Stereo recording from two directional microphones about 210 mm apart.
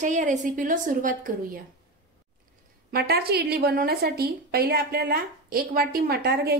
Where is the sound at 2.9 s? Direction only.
50° right (ahead or behind).